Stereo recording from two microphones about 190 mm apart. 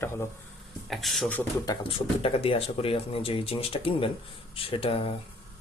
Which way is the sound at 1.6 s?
25° left (ahead or behind).